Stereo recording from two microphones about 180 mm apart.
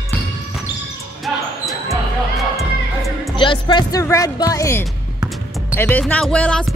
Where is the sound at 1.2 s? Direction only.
Centre (ahead or behind).